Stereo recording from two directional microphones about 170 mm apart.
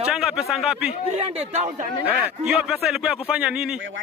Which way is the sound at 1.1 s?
40° right (ahead or behind).